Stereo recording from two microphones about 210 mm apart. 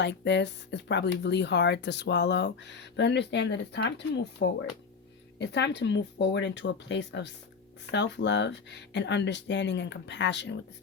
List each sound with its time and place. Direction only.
0.0 s speech: 55° left (ahead or behind)